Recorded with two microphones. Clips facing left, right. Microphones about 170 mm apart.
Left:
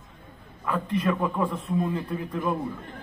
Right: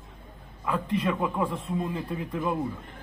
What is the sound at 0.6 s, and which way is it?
A man's voice, 15° right (ahead or behind).